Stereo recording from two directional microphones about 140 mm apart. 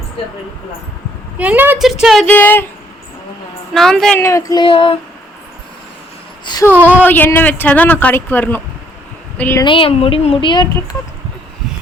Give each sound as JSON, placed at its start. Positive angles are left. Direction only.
{"t": 1.4, "sound": "speech", "side_deg": -10}
{"t": 1.8, "sound": "speech", "side_deg": -5}
{"t": 2.2, "sound": "speech", "side_deg": 15}
{"t": 3.8, "sound": "speech", "side_deg": 5}
{"t": 4.2, "sound": "speech", "side_deg": 20}
{"t": 4.6, "sound": "speech", "side_deg": 40}
{"t": 6.4, "sound": "a sound", "side_deg": 30}
{"t": 6.8, "sound": "speech", "side_deg": 15}
{"t": 9.6, "sound": "speech", "side_deg": 40}